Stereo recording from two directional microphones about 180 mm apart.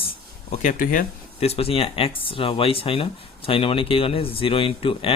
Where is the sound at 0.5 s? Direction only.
45° left (ahead or behind).